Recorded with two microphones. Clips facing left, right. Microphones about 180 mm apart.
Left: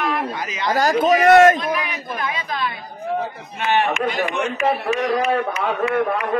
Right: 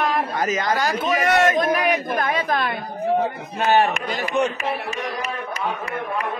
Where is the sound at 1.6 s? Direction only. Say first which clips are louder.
Right 5 dB; 45° right (ahead or behind).